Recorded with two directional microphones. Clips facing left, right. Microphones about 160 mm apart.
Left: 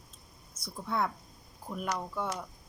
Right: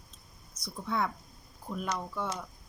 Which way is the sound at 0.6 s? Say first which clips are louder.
Even; 5° left (ahead or behind).